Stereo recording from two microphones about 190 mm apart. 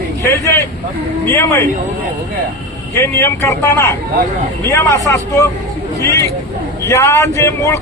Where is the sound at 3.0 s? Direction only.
15° left (ahead or behind).